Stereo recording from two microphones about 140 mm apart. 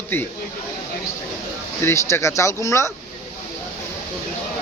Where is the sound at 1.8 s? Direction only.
20° left (ahead or behind).